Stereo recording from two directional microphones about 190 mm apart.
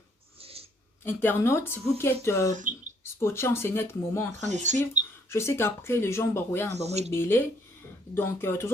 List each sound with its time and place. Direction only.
0.3 s a sound: 30° right (ahead or behind)
1.0 s speech: 10° left (ahead or behind)
4.4 s speech: 40° right (ahead or behind)
5.3 s speech: 15° left (ahead or behind)
6.8 s speech: 35° right (ahead or behind)
7.1 s speech: 10° left (ahead or behind)